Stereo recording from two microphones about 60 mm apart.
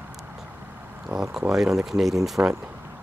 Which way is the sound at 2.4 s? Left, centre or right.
Right.